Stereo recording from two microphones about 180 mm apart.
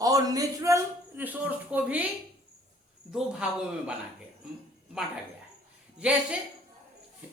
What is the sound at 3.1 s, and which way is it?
Speech, 5° right (ahead or behind).